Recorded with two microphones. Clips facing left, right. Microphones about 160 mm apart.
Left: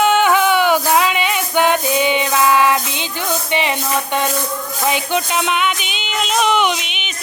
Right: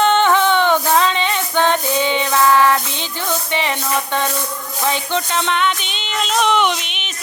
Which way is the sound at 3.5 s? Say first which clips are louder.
Left 3 dB; 15° left (ahead or behind).